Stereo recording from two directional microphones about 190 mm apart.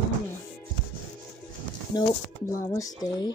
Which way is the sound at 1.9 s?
15° left (ahead or behind).